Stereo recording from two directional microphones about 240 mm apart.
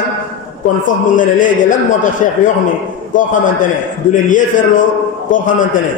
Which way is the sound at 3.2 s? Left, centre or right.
Left.